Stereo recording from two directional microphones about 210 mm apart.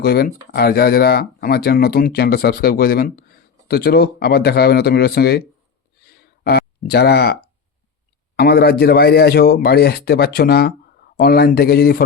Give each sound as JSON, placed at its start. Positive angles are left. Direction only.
{"t": 0.0, "sound": "speech", "side_deg": 45}
{"t": 6.4, "sound": "speech", "side_deg": 50}
{"t": 8.4, "sound": "speech", "side_deg": 50}